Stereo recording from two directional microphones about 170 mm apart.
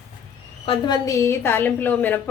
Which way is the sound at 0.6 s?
30° left (ahead or behind).